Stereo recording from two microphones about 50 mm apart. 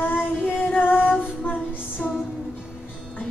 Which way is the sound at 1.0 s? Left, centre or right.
Left.